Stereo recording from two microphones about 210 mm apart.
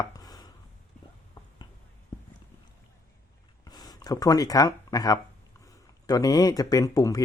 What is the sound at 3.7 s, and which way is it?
Speech, 20° left (ahead or behind).